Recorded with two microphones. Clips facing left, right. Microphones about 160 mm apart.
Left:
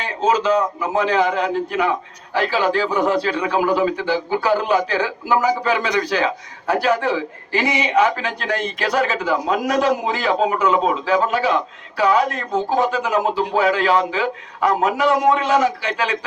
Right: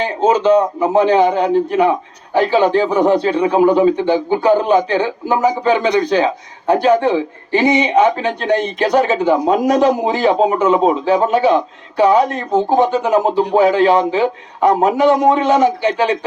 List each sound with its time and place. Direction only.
0.0 s a man's voice: 30° right (ahead or behind)